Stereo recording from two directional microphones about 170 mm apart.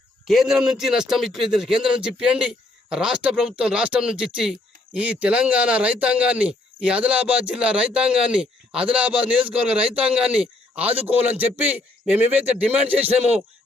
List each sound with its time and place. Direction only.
0.3 s a man's voice: centre (ahead or behind)
12.9 s a man's voice: 35° right (ahead or behind)